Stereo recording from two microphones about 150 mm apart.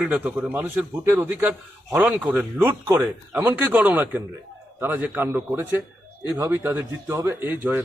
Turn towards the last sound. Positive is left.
turn(degrees=-15)  # may be behind; listen again after turning